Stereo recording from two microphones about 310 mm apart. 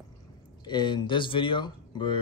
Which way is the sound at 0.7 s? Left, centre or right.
Centre.